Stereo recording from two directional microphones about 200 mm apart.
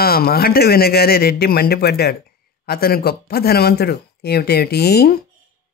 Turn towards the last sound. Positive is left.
turn(degrees=50)  # may be behind; listen again after turning